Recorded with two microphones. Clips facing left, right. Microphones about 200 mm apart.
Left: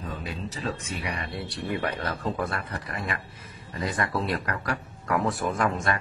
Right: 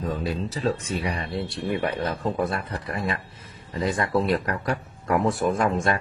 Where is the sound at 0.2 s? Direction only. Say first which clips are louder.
Right 7 dB; 35° right (ahead or behind).